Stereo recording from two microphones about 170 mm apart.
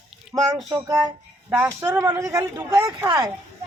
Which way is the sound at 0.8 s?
20° right (ahead or behind).